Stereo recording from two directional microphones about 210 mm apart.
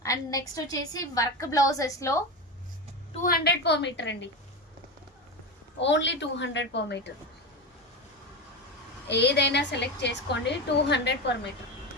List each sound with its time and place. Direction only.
0.0 s a woman's voice: 15° left (ahead or behind)
3.2 s a woman's voice: 45° left (ahead or behind)
5.8 s a woman's voice: 60° left (ahead or behind)
9.0 s a woman's voice: 55° left (ahead or behind)